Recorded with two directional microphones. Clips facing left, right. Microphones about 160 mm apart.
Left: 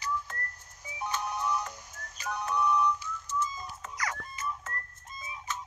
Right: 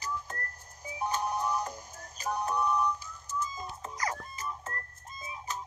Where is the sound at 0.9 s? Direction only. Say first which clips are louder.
Right 2 dB; 35° right (ahead or behind).